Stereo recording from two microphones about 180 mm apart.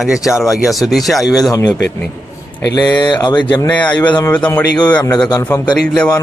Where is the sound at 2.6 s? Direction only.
20° left (ahead or behind).